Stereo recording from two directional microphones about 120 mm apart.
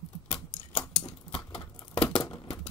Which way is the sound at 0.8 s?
10° left (ahead or behind).